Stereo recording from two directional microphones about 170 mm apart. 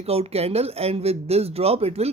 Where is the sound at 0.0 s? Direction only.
35° right (ahead or behind).